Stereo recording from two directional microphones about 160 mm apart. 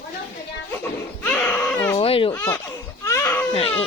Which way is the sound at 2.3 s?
15° left (ahead or behind).